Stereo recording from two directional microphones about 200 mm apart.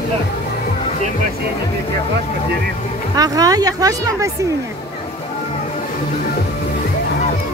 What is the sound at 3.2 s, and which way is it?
Speech, 20° right (ahead or behind).